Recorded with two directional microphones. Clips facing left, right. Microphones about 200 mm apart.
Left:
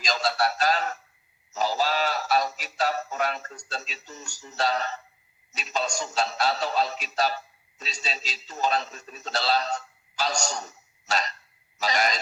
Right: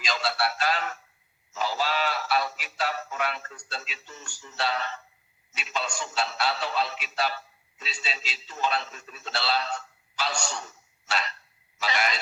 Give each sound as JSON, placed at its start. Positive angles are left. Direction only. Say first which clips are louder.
{"t": 0.0, "sound": "music", "louder": "left 3 dB", "side_deg": 40}
{"t": 5.5, "sound": "a man's voice", "louder": "left 3 dB", "side_deg": 40}